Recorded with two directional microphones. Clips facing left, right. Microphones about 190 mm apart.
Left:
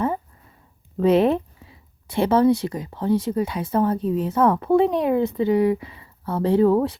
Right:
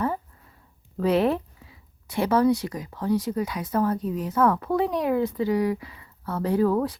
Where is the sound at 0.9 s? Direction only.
25° left (ahead or behind).